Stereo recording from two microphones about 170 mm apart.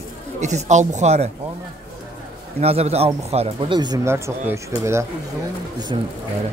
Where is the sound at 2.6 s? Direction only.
35° right (ahead or behind); by 5.0 s 15° right (ahead or behind).